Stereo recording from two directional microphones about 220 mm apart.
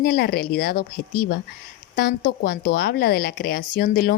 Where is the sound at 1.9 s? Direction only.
40° left (ahead or behind).